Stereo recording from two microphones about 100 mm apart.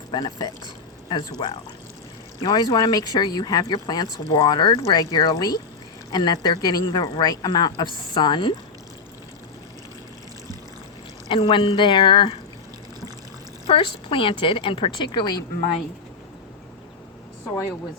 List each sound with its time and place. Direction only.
0.1 s speech: 45° left (ahead or behind)
11.3 s a woman's voice: 60° left (ahead or behind)
13.7 s a woman's voice: 60° left (ahead or behind)